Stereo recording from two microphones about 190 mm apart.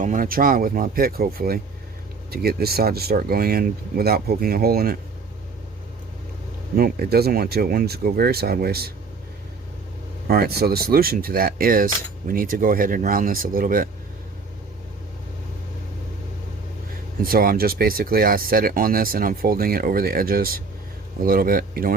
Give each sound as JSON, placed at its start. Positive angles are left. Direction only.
{"t": 0.0, "sound": "speech", "side_deg": -45}
{"t": 6.7, "sound": "speech", "side_deg": -50}
{"t": 10.2, "sound": "speech", "side_deg": -55}
{"t": 17.2, "sound": "speech", "side_deg": -50}